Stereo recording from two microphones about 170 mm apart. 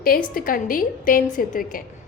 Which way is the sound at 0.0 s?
55° left (ahead or behind).